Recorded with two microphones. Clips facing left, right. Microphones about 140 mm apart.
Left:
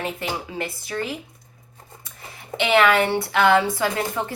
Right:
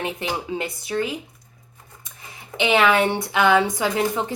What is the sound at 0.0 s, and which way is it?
Speech, 20° right (ahead or behind).